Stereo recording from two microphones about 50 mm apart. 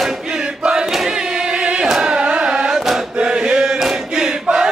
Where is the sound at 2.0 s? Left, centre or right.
Right.